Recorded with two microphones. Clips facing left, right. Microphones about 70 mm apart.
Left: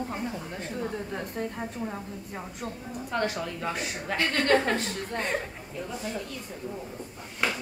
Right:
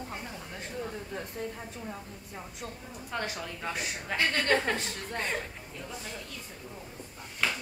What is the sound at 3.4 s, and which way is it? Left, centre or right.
Speech, centre.